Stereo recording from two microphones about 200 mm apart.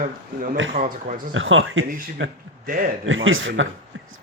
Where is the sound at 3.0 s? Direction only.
85° right.